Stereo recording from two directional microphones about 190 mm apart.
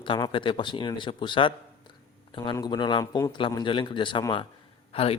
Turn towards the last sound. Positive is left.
turn(degrees=30)  # may be behind; listen again after turning